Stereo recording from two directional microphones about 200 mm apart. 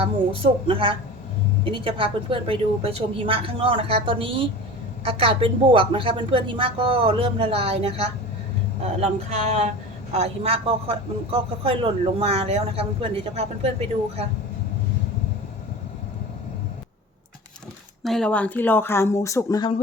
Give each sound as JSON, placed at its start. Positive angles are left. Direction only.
{"t": 0.7, "sound": "speech", "side_deg": -25}
{"t": 18.0, "sound": "speech", "side_deg": 0}